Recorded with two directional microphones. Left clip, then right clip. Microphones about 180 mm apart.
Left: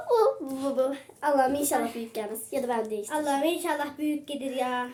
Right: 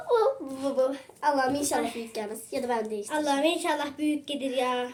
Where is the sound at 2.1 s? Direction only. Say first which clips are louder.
Left 1 dB; 15° left (ahead or behind).